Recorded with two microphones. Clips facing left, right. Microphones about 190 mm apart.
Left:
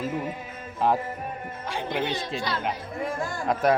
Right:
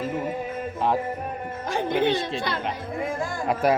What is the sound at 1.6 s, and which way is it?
Speech, 45° right (ahead or behind).